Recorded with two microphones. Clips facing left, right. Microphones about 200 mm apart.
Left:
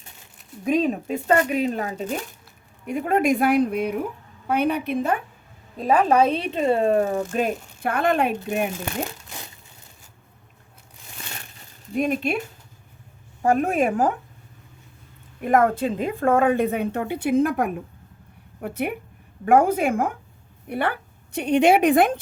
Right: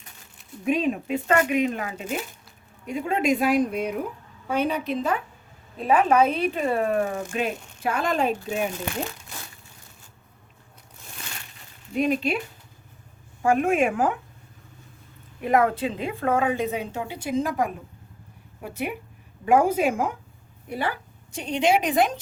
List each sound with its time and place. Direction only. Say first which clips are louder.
0.6 s speech: left 2 dB; 35° left (ahead or behind)
2.8 s a woman's voice: left 3 dB; 55° left (ahead or behind)
5.7 s speech: left 1 dB; 40° left (ahead or behind)
7.3 s a woman's voice: left 4 dB; 50° left (ahead or behind)
11.9 s speech: even; 50° left (ahead or behind)
13.4 s speech: left 1 dB; 35° left (ahead or behind)
15.4 s a woman's voice: left 2 dB; 45° left (ahead or behind)